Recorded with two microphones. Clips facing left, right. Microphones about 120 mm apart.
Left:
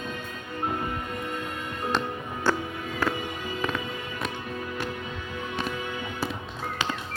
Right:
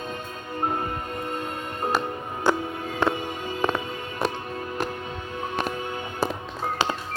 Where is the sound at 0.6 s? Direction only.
40° right (ahead or behind).